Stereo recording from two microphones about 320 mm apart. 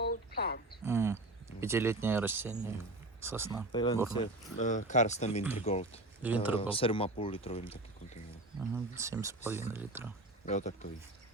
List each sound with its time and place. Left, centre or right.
0.0 s a sound: left
0.9 s speech: centre
3.7 s speech: centre
5.4 s speech: centre
5.6 s speech: centre
6.2 s speech: centre
6.6 s speech: centre
8.7 s speech: centre
10.4 s speech: left